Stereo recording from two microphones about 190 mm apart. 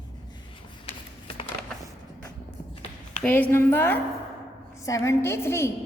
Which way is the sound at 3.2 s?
10° left (ahead or behind).